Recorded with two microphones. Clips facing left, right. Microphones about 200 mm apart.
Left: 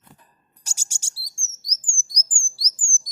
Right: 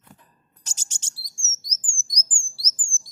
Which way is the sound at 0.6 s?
10° left (ahead or behind).